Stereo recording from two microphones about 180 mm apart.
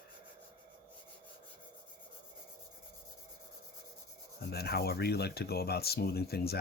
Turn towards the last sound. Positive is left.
turn(degrees=60)  # may be behind; listen again after turning